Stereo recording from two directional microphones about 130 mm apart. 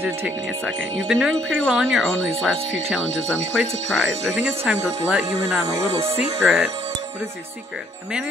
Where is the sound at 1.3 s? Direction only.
5° left (ahead or behind).